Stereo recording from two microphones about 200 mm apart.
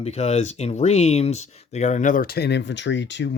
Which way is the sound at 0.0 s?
35° left (ahead or behind).